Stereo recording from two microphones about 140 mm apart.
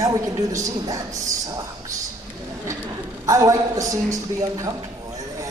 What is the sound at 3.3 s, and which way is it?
A woman's voice, 25° right (ahead or behind).